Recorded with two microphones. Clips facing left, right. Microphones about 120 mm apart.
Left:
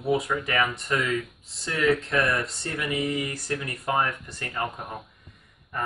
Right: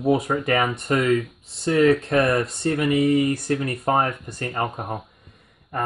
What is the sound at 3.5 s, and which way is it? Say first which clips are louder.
Speech: right 2 dB; 45° right (ahead or behind).